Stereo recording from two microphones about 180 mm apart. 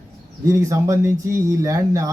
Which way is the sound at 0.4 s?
20° right (ahead or behind).